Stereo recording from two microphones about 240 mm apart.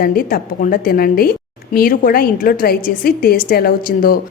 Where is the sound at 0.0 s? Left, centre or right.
Left.